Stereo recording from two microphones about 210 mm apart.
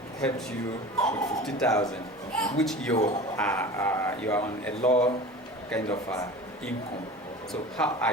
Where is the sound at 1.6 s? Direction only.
15° left (ahead or behind).